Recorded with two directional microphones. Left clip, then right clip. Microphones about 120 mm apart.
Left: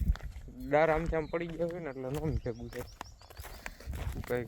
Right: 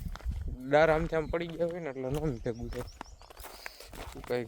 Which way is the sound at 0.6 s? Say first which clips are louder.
Right 3 dB; 30° right (ahead or behind).